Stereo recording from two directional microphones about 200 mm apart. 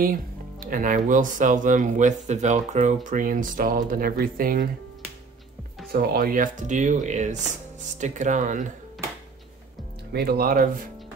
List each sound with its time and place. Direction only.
0.0 s speech: 45° right (ahead or behind)
5.9 s speech: 45° right (ahead or behind)
10.1 s speech: 50° right (ahead or behind)